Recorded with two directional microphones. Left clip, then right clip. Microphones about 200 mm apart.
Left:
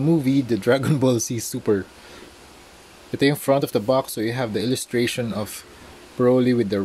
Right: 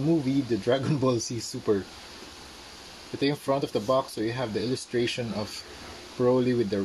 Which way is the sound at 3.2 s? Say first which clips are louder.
Left 7 dB; 50° left (ahead or behind).